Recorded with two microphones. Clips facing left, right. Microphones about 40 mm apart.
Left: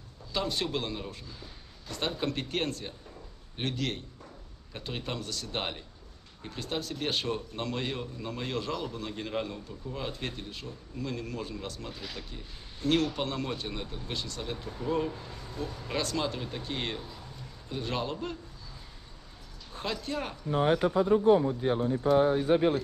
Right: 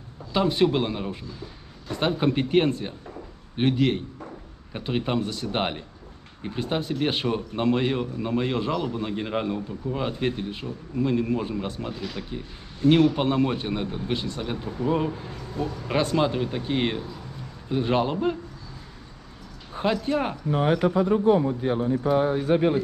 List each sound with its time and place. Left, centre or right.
0.3 s a man's voice: right
11.9 s speech: centre
12.3 s a man's voice: right
19.7 s speech: right
20.5 s a man's voice: right